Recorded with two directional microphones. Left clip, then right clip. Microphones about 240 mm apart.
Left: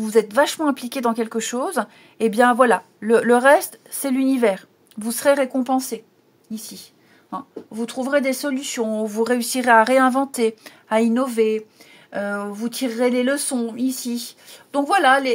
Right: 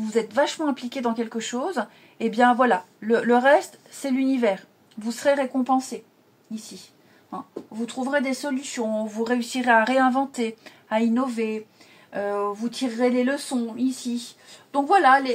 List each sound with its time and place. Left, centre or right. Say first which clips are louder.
0.0 s speech: left 5 dB; left
7.2 s speech: left 4 dB; left